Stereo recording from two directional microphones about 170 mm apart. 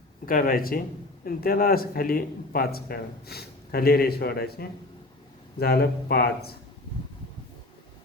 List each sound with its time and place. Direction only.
0.3 s a man's voice: 55° left (ahead or behind)